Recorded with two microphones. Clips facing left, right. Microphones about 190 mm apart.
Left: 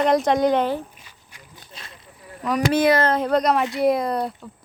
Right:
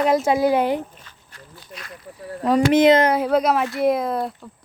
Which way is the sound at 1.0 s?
10° left (ahead or behind).